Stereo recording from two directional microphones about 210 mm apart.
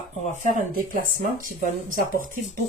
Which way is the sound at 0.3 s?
40° right (ahead or behind).